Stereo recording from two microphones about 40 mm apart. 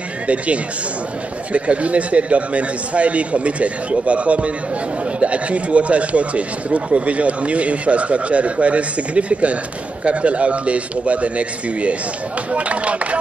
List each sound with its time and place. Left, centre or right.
1.5 s speech: right